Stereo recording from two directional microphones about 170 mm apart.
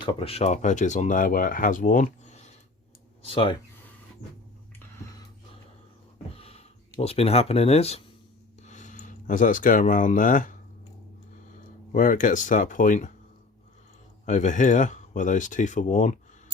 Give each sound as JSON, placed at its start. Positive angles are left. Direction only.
{"t": 0.0, "sound": "speech", "side_deg": 35}
{"t": 3.2, "sound": "speech", "side_deg": 30}
{"t": 6.3, "sound": "a sound", "side_deg": 35}
{"t": 7.0, "sound": "speech", "side_deg": 35}
{"t": 8.6, "sound": "speech", "side_deg": 45}
{"t": 11.9, "sound": "speech", "side_deg": 50}
{"t": 14.3, "sound": "speech", "side_deg": 45}